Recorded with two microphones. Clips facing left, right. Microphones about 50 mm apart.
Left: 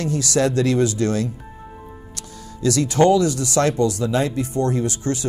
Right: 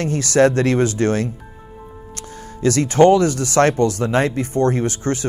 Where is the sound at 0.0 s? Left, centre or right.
Right.